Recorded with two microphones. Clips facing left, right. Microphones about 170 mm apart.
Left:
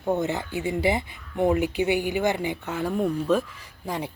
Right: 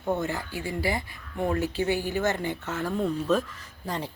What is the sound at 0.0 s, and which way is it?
Speech, 20° left (ahead or behind).